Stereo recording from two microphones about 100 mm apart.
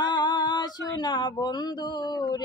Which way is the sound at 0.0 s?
50° left (ahead or behind).